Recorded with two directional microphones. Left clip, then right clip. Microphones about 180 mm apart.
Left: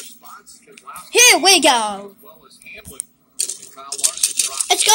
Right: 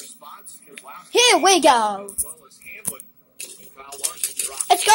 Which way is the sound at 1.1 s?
5° left (ahead or behind).